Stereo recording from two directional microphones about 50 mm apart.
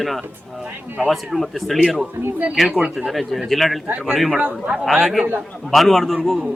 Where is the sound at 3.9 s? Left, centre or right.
Right.